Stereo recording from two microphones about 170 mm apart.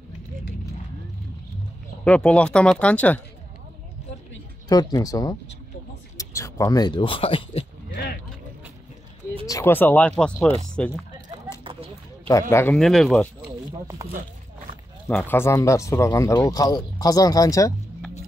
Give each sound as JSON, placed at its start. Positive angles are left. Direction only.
{"t": 2.0, "sound": "speech", "side_deg": 5}
{"t": 4.6, "sound": "speech", "side_deg": 20}
{"t": 7.9, "sound": "a sound", "side_deg": 60}
{"t": 9.5, "sound": "speech", "side_deg": 15}
{"t": 11.6, "sound": "a sound", "side_deg": -30}
{"t": 12.3, "sound": "speech", "side_deg": 15}
{"t": 12.7, "sound": "speech", "side_deg": 5}
{"t": 14.0, "sound": "speech", "side_deg": -20}
{"t": 15.0, "sound": "speech", "side_deg": 10}